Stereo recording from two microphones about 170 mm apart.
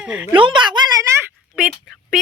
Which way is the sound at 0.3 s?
30° right (ahead or behind).